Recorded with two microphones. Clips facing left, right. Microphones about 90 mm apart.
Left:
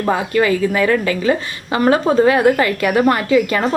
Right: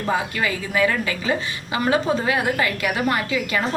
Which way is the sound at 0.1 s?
50° left (ahead or behind).